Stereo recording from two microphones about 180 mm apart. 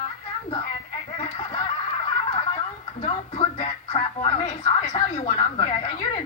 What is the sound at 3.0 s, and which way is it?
Speech, 30° left (ahead or behind).